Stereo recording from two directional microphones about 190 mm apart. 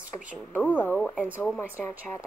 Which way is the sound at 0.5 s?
10° left (ahead or behind).